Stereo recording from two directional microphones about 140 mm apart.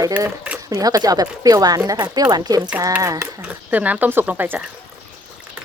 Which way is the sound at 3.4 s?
10° right (ahead or behind).